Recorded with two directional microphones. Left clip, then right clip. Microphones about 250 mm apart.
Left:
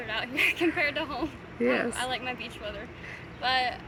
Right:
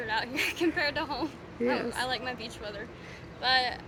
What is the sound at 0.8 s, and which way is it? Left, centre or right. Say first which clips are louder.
Speech: left 1 dB; centre.